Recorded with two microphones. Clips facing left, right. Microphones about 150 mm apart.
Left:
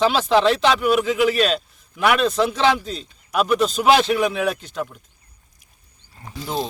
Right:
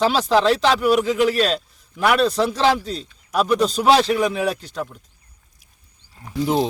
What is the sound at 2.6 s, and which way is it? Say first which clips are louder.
Speech: right 1 dB; centre (ahead or behind).